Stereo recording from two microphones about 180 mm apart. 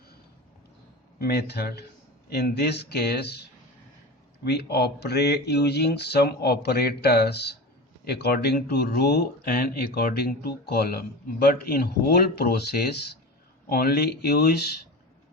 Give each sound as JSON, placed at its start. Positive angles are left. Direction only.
{"t": 1.2, "sound": "speech", "side_deg": 65}
{"t": 4.4, "sound": "speech", "side_deg": 65}